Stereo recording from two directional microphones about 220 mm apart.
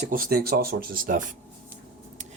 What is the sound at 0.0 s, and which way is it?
Speech, 40° right (ahead or behind).